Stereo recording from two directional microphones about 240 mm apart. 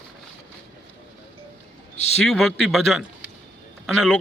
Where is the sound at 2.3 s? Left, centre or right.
Centre.